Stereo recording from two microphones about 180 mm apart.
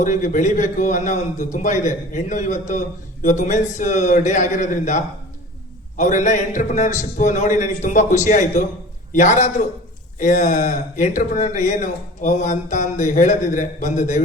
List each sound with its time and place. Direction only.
0.0 s speech: 45° left (ahead or behind)